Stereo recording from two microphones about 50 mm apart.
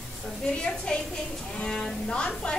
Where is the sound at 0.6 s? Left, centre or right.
Centre.